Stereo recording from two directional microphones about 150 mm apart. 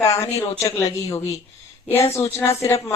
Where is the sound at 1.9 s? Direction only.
15° left (ahead or behind).